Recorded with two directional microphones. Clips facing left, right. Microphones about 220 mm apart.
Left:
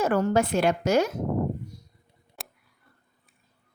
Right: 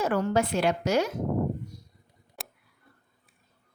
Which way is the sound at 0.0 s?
45° left (ahead or behind).